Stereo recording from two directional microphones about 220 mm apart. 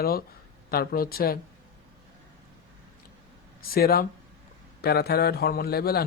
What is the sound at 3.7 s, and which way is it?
Speech, 45° left (ahead or behind).